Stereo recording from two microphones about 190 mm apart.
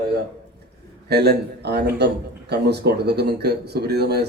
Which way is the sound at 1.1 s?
60° right (ahead or behind).